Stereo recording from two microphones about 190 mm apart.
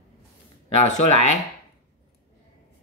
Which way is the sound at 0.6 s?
35° left (ahead or behind).